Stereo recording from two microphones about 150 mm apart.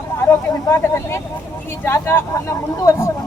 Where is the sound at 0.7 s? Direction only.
15° left (ahead or behind).